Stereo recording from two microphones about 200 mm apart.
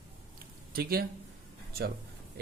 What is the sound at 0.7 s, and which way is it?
Speech, 50° right (ahead or behind).